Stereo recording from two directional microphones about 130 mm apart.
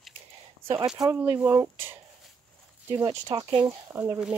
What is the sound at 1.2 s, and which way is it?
Speech, 15° right (ahead or behind).